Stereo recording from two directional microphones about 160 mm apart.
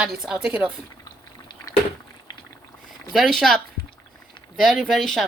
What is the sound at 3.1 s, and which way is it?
Speech, centre (ahead or behind).